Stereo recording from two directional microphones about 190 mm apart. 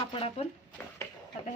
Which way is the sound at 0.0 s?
30° left (ahead or behind).